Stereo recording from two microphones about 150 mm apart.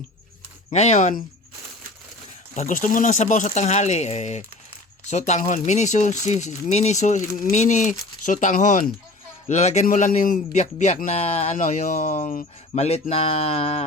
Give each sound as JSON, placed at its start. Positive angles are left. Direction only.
{"t": 0.7, "sound": "a man's voice", "side_deg": 50}
{"t": 2.6, "sound": "a man's voice", "side_deg": 55}